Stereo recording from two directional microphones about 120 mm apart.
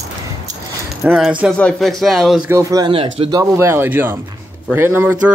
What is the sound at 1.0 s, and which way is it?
Speech, centre (ahead or behind).